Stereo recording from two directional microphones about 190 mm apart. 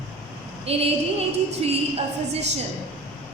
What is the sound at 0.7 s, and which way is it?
A woman's voice, 30° right (ahead or behind).